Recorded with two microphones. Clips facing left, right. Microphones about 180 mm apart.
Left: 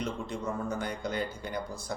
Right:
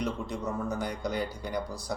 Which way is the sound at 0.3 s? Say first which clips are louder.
Right 1 dB; 25° left (ahead or behind).